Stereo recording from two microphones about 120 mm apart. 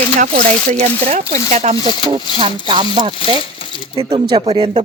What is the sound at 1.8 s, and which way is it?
Speech, 45° right (ahead or behind).